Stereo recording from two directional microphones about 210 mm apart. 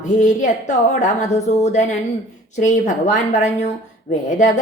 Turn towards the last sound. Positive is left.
turn(degrees=35)  # may be behind; listen again after turning